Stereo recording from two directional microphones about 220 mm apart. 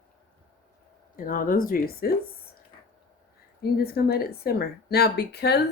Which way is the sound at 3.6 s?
45° left (ahead or behind).